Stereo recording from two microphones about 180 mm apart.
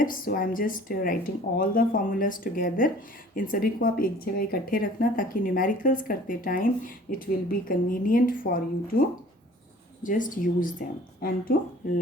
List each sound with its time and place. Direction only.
0.0 s speech: 50° left (ahead or behind)
10.0 s speech: 45° left (ahead or behind)